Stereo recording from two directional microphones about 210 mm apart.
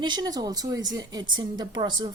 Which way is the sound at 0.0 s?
20° right (ahead or behind).